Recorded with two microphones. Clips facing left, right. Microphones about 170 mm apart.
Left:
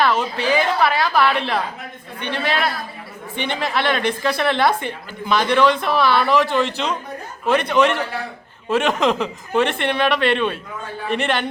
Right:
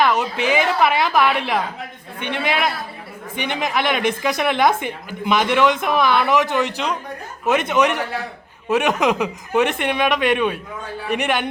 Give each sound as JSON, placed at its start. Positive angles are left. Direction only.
{"t": 0.0, "sound": "speech", "side_deg": -15}